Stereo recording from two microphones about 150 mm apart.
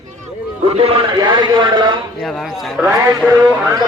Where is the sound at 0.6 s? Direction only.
40° right (ahead or behind).